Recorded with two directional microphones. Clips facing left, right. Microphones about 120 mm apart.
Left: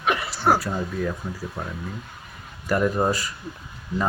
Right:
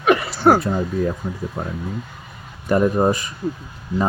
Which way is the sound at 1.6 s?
40° right (ahead or behind).